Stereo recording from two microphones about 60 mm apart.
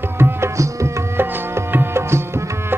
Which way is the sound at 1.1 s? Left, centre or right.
Right.